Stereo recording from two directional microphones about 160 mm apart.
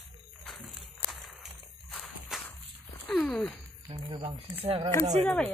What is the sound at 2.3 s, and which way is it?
Whip, centre (ahead or behind).